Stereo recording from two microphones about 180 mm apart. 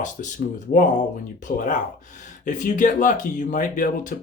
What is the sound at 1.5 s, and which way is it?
Speech, 50° left (ahead or behind).